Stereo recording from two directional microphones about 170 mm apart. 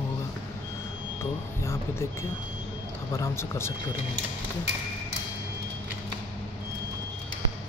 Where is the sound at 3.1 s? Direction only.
15° left (ahead or behind).